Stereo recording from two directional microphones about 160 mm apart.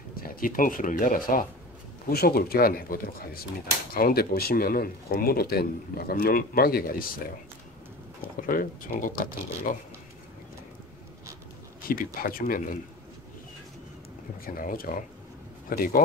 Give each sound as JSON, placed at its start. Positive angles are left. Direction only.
{"t": 0.1, "sound": "speech", "side_deg": 65}
{"t": 2.0, "sound": "speech", "side_deg": 70}
{"t": 8.4, "sound": "speech", "side_deg": 60}
{"t": 11.9, "sound": "speech", "side_deg": 65}
{"t": 14.4, "sound": "speech", "side_deg": 60}